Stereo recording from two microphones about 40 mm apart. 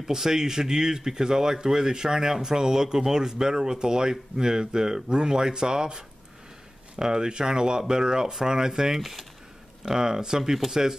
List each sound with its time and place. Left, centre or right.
0.0 s speech: centre